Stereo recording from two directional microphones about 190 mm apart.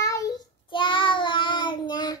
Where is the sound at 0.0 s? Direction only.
15° left (ahead or behind).